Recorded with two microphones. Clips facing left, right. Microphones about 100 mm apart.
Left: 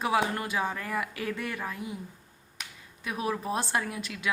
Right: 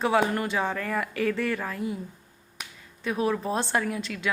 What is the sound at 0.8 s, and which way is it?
Speech, 25° left (ahead or behind).